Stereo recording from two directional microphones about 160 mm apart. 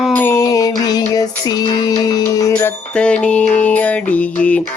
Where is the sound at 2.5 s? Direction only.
5° left (ahead or behind).